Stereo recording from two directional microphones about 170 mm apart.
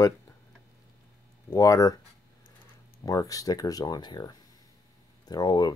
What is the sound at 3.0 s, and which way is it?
Speech, 20° left (ahead or behind).